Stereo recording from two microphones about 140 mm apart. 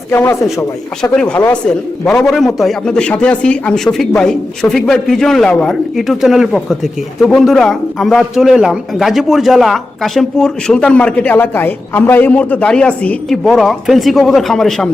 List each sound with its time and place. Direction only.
0.1 s a man's voice: 15° left (ahead or behind)